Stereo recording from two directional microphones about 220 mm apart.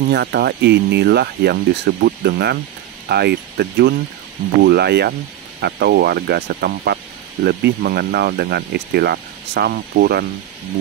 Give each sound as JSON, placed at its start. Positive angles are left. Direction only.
{"t": 0.1, "sound": "speech", "side_deg": -50}